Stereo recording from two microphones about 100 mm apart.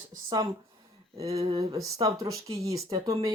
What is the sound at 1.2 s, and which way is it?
Speech, 35° right (ahead or behind).